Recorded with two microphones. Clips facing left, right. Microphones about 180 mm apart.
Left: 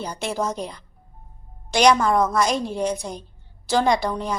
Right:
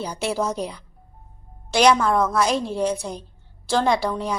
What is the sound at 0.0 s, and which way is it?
A woman's voice, 5° right (ahead or behind).